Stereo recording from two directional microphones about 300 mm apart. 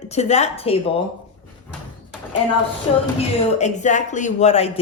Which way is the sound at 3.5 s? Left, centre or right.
Left.